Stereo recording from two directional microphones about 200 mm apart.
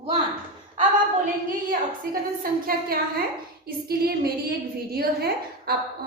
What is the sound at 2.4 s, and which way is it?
A woman's voice, 45° right (ahead or behind).